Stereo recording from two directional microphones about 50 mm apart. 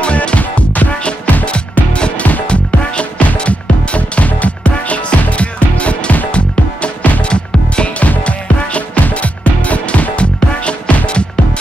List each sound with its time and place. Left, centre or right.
0.0 s music: left